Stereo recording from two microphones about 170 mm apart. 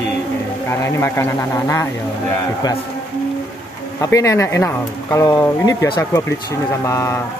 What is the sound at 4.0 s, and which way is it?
Speech, 20° left (ahead or behind).